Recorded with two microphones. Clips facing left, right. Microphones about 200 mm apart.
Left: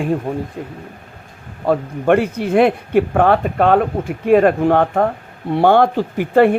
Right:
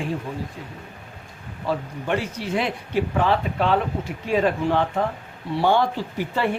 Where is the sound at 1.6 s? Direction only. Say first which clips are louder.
Left 10 dB; 55° left (ahead or behind).